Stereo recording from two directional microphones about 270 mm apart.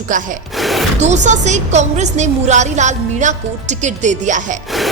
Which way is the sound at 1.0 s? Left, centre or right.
Right.